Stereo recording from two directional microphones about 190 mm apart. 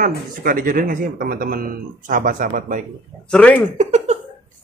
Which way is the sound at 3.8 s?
35° right (ahead or behind).